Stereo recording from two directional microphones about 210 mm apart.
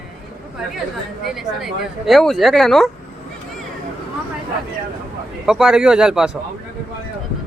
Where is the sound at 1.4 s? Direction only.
Centre (ahead or behind).